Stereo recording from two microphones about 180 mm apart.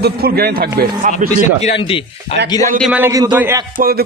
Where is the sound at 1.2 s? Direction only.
45° right (ahead or behind).